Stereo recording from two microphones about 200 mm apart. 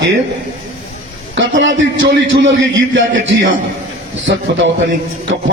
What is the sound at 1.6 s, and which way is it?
A man's voice, 70° right (ahead or behind).